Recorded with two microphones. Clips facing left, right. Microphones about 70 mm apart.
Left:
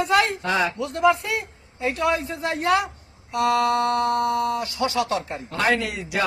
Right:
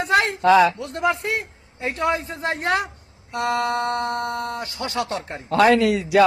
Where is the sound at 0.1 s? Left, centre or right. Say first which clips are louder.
Right 2 dB; right.